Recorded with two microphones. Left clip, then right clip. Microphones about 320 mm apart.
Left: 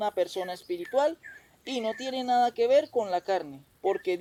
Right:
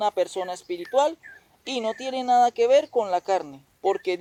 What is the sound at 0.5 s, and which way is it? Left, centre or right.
Speech, centre.